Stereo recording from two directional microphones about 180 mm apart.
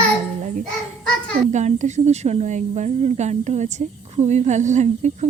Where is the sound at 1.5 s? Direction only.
40° right (ahead or behind).